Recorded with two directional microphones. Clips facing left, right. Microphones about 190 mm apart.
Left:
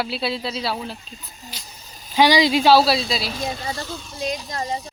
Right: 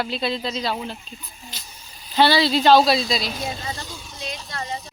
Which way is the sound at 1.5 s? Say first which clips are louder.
Left 1 dB; 10° left (ahead or behind).